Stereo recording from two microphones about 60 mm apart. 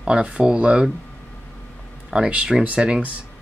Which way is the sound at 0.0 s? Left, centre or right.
Centre.